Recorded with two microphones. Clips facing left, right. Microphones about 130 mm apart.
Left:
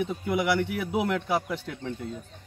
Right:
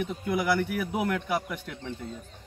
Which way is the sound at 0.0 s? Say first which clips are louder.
Left 2 dB; 20° left (ahead or behind).